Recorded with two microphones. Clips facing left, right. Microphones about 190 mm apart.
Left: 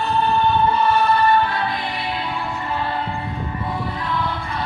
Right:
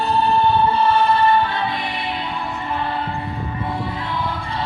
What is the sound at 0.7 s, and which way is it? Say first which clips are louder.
Music: right 1 dB; 30° right (ahead or behind).